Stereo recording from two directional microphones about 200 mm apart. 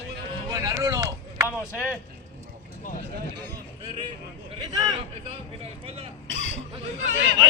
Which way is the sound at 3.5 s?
25° right (ahead or behind).